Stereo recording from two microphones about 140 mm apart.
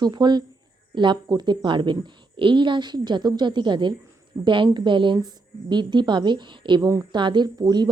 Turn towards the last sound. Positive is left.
turn(degrees=-30)  # may be behind; listen again after turning